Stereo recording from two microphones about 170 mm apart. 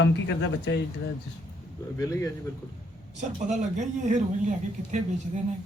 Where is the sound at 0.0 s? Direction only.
90° left.